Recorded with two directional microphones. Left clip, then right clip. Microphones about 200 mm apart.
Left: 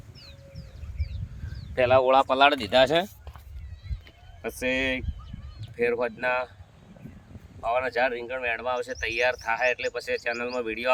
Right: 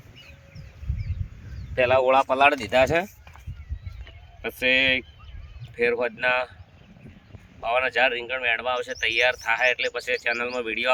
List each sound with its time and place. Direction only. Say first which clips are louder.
1.7 s speech: right 1 dB; centre (ahead or behind)
4.0 s run: right 2 dB; 10° left (ahead or behind)
5.7 s speech: right 2 dB; 5° left (ahead or behind)
7.6 s speech: right 3 dB; 5° left (ahead or behind)